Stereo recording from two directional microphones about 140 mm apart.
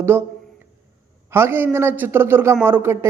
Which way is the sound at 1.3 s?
15° right (ahead or behind).